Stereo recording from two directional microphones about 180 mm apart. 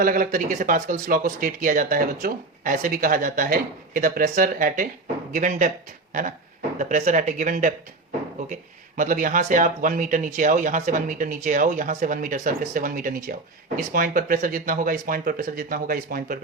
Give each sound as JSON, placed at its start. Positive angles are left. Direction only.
{"t": 0.0, "sound": "speech", "side_deg": -50}
{"t": 6.7, "sound": "speech", "side_deg": -45}
{"t": 9.0, "sound": "speech", "side_deg": -45}